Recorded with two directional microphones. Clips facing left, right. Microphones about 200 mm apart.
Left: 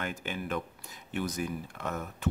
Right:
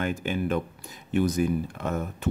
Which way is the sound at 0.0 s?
20° right (ahead or behind).